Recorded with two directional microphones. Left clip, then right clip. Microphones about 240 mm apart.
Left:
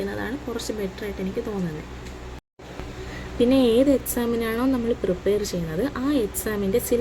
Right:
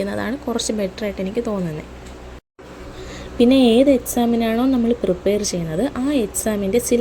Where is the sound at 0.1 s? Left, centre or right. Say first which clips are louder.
Right 6 dB; right.